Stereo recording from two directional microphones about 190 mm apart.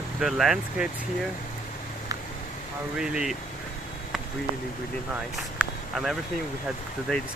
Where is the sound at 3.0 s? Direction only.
5° right (ahead or behind).